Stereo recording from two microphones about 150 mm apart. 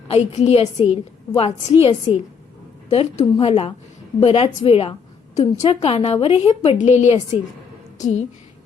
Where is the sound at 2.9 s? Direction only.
40° left (ahead or behind).